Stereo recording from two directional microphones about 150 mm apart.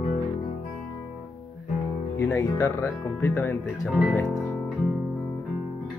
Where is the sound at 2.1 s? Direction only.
15° left (ahead or behind).